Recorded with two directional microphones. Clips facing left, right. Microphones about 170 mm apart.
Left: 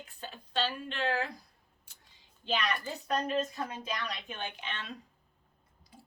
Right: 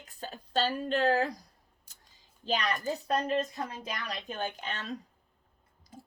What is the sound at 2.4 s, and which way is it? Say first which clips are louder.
A woman's voice: right 2 dB; 40° right (ahead or behind).